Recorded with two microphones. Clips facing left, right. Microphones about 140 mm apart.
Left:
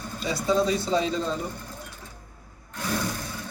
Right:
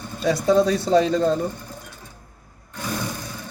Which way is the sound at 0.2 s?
55° right (ahead or behind).